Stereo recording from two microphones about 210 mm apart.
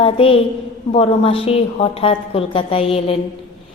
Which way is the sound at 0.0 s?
25° left (ahead or behind).